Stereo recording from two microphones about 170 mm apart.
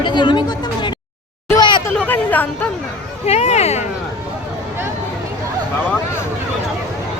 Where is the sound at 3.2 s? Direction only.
40° left (ahead or behind).